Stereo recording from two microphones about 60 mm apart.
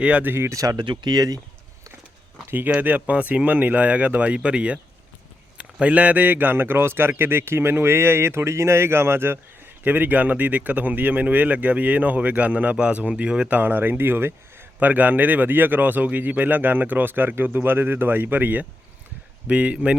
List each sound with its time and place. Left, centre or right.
0.0 s speech: right
0.3 s speech: right
0.5 s speech: right
2.5 s a man's voice: right
13.6 s a man's voice: right
14.8 s a man's voice: right